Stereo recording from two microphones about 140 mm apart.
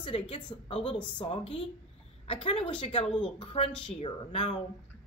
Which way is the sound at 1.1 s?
40° left (ahead or behind).